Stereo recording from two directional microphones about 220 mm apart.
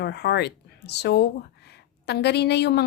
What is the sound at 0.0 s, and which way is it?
Speech, 50° left (ahead or behind).